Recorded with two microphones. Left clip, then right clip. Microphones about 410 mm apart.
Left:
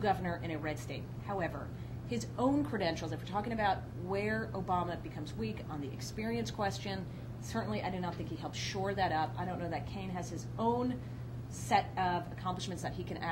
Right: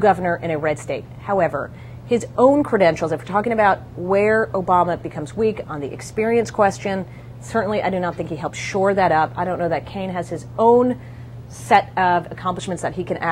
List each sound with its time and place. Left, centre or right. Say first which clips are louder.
0.0 s speech: right 17 dB; right
11.7 s a woman's voice: right 16 dB; right